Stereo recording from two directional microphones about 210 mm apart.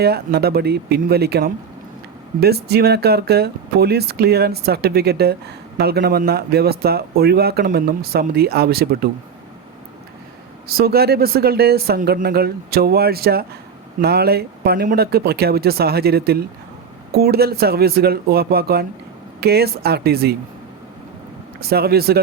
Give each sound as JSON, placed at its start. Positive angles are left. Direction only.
{"t": 0.0, "sound": "speech", "side_deg": -50}
{"t": 10.7, "sound": "speech", "side_deg": -45}
{"t": 21.6, "sound": "speech", "side_deg": -45}